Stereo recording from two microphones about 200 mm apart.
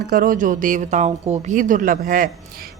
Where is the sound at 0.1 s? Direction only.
45° right (ahead or behind).